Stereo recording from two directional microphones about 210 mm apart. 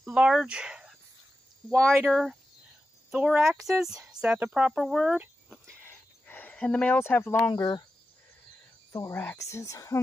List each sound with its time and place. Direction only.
0.0 s speech: 5° right (ahead or behind)
2.0 s speech: centre (ahead or behind)
5.9 s a sound: 10° left (ahead or behind)
8.9 s speech: 10° left (ahead or behind)